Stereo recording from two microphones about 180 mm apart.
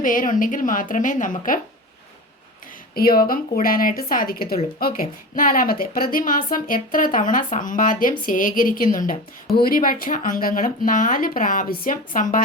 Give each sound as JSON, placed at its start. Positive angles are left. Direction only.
{"t": 0.0, "sound": "a woman's voice", "side_deg": 50}
{"t": 2.9, "sound": "a woman's voice", "side_deg": 55}